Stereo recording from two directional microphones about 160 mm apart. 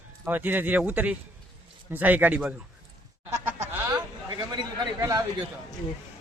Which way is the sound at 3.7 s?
10° right (ahead or behind).